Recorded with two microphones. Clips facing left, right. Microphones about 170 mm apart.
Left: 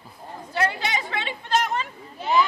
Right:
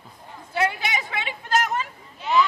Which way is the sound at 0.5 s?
10° right (ahead or behind).